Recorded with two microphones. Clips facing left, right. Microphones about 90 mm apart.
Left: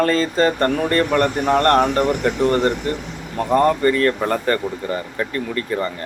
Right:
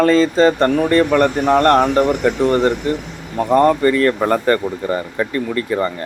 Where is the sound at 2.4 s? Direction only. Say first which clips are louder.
Right 2 dB; 20° right (ahead or behind).